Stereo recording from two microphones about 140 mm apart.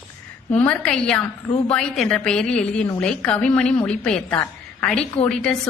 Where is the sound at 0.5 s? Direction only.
10° left (ahead or behind).